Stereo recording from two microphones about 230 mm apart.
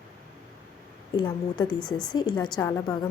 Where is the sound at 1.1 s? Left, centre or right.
Centre.